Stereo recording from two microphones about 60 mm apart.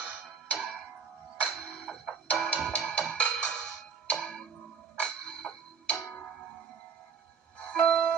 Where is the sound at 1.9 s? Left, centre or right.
Centre.